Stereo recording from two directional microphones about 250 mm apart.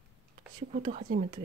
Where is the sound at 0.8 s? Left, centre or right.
Right.